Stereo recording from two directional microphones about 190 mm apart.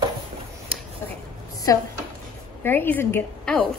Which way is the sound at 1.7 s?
15° left (ahead or behind).